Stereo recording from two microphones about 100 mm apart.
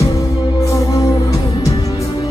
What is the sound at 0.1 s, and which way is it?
Music, 35° left (ahead or behind).